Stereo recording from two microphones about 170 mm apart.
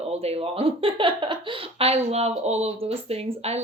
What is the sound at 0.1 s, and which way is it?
Speech, 35° right (ahead or behind).